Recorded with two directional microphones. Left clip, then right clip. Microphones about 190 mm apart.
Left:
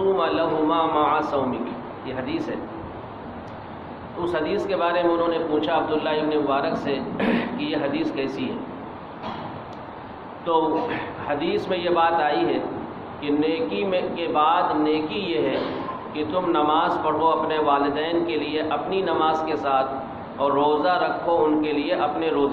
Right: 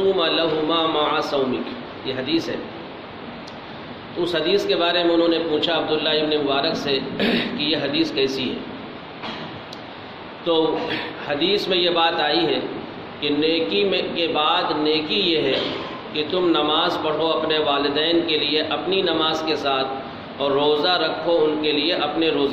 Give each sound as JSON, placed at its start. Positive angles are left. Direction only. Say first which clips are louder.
{"t": 0.2, "sound": "a sound", "louder": "right 1 dB", "side_deg": -60}
{"t": 2.0, "sound": "a man's voice", "louder": "right 5 dB", "side_deg": -60}
{"t": 4.3, "sound": "a man's voice", "louder": "right 4 dB", "side_deg": -60}
{"t": 10.4, "sound": "a man's voice", "louder": "right 1 dB", "side_deg": -60}